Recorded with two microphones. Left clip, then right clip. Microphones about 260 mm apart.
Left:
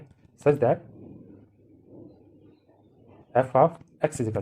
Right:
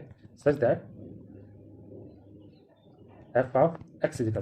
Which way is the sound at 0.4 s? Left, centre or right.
Left.